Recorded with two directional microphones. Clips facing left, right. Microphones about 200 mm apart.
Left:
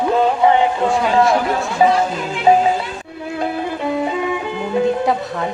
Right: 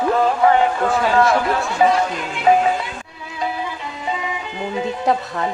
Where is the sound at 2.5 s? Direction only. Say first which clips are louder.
Left 2 dB; 30° left (ahead or behind).